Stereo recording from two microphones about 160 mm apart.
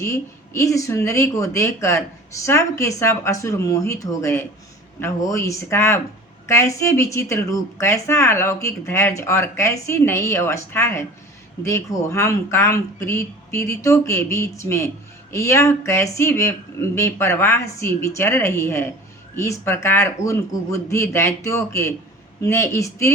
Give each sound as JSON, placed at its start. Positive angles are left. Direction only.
{"t": 0.0, "sound": "speech", "side_deg": 20}